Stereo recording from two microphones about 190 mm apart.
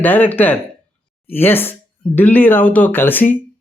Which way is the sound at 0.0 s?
10° left (ahead or behind).